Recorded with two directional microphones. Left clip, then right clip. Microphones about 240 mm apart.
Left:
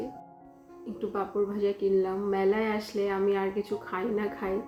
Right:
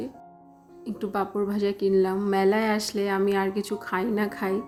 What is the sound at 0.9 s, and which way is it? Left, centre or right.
A woman's voice, right.